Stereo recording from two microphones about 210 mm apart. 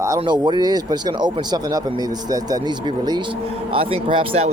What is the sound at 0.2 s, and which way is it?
Speech, 20° right (ahead or behind).